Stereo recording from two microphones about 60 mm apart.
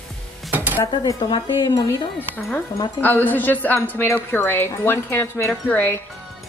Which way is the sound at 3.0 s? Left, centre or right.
Left.